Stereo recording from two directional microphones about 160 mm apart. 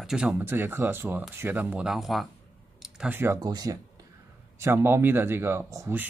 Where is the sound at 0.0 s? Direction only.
5° right (ahead or behind).